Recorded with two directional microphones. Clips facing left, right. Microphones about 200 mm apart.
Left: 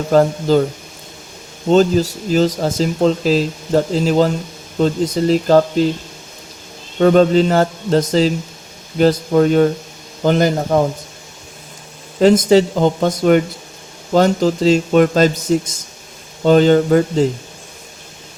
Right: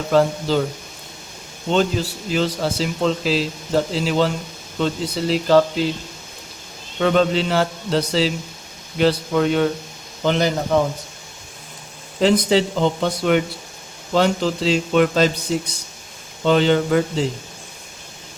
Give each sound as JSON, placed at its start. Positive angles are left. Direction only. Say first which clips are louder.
{"t": 0.1, "sound": "speech", "louder": "left 5 dB", "side_deg": 45}
{"t": 1.7, "sound": "speech", "louder": "left 7 dB", "side_deg": 40}
{"t": 7.0, "sound": "speech", "louder": "left 7 dB", "side_deg": 40}
{"t": 12.2, "sound": "speech", "louder": "left 6 dB", "side_deg": 45}